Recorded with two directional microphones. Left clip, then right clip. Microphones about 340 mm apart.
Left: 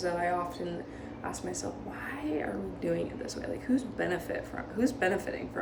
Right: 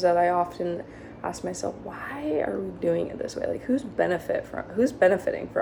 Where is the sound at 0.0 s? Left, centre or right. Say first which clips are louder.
Right 10 dB; centre.